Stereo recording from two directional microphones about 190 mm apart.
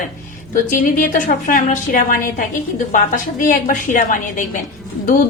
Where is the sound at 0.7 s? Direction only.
45° left (ahead or behind).